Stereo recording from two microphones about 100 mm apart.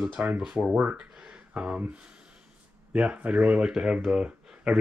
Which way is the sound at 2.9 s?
10° right (ahead or behind).